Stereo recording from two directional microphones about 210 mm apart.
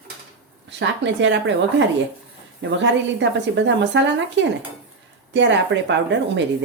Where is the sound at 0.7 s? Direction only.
60° right (ahead or behind).